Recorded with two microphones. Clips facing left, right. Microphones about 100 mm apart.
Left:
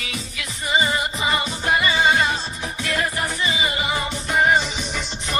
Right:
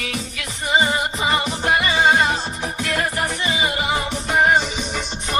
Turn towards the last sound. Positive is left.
turn(degrees=-50)  # may be behind; listen again after turning